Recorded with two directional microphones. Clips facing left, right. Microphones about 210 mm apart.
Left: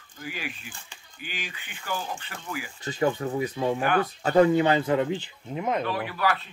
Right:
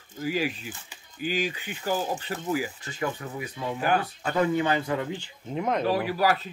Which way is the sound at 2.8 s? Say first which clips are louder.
Left 6 dB; 40° left (ahead or behind).